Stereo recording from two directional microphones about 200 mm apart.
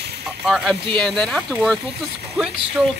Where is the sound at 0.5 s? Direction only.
Centre (ahead or behind).